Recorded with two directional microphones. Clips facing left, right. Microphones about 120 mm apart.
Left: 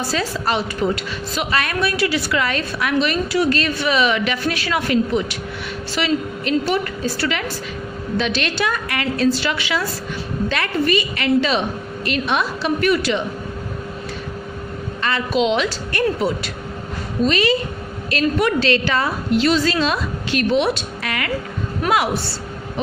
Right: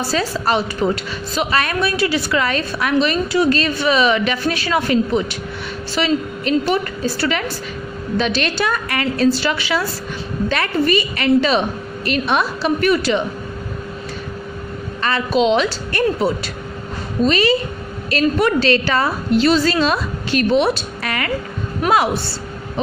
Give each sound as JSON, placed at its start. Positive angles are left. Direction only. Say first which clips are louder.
{"t": 0.1, "sound": "a woman's voice", "louder": "right 4 dB", "side_deg": -30}
{"t": 15.0, "sound": "a woman's voice", "louder": "right 2 dB", "side_deg": -40}
{"t": 21.8, "sound": "a woman's voice", "louder": "right 3 dB", "side_deg": -25}